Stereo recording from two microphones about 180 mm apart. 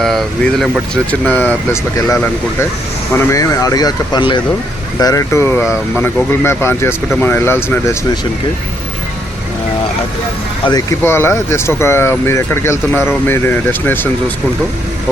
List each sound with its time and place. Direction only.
0.0 s speech: centre (ahead or behind)
11.0 s speech: 15° left (ahead or behind)